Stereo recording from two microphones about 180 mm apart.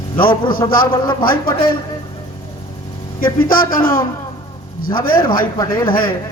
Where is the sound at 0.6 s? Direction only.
25° left (ahead or behind).